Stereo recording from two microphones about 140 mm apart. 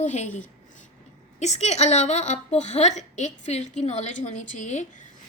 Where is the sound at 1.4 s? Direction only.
55° left (ahead or behind).